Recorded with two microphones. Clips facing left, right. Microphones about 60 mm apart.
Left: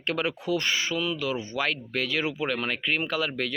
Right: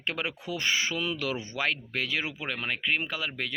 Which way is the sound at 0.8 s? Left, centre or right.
Right.